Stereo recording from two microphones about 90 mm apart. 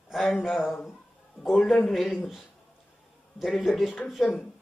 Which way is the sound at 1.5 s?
10° left (ahead or behind).